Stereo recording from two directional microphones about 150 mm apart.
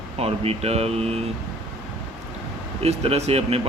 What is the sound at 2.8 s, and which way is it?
Speech, 45° right (ahead or behind).